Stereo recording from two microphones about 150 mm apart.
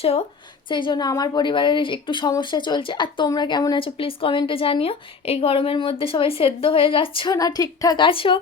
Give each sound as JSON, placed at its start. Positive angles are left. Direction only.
{"t": 0.0, "sound": "a woman's voice", "side_deg": 40}
{"t": 0.7, "sound": "a woman's voice", "side_deg": 30}
{"t": 7.3, "sound": "a woman's voice", "side_deg": 25}